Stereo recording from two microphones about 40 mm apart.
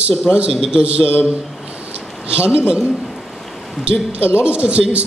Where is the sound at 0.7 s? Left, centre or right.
Right.